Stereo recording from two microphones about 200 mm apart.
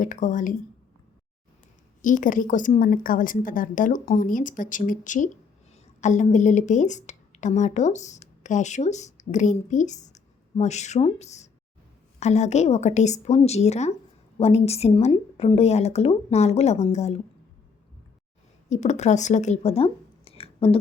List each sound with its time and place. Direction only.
0.0 s a woman's voice: 40° left (ahead or behind)
2.0 s a woman's voice: 40° left (ahead or behind)
18.7 s speech: 35° left (ahead or behind)